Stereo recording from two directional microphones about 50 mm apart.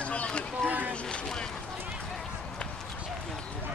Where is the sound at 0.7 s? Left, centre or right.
Right.